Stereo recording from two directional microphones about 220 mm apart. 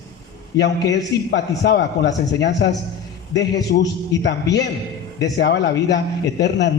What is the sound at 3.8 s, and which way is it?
A man's voice, 50° left (ahead or behind).